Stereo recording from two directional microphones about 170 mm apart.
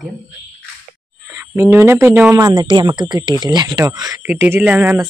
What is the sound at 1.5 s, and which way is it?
Speech, 15° right (ahead or behind).